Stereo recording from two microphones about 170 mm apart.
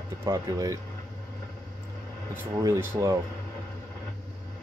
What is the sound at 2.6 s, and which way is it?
Speech, 20° right (ahead or behind).